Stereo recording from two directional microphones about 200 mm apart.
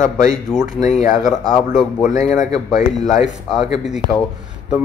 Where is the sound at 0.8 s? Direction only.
35° left (ahead or behind).